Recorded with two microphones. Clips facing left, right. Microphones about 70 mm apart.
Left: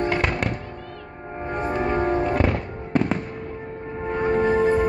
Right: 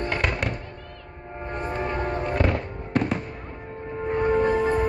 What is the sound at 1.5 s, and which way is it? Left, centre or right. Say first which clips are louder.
Music: left 5 dB; centre.